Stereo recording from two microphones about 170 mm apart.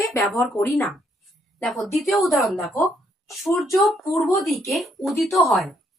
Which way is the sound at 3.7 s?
15° left (ahead or behind).